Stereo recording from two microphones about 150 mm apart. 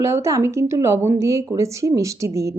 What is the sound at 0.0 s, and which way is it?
Speech, 20° right (ahead or behind).